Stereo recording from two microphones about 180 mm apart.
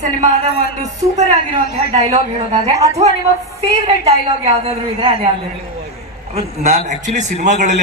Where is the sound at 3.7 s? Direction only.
35° right (ahead or behind).